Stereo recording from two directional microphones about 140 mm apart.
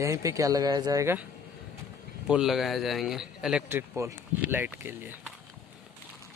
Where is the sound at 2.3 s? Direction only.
5° right (ahead or behind).